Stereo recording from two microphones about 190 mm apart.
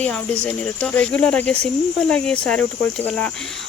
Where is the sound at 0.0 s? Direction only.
5° left (ahead or behind).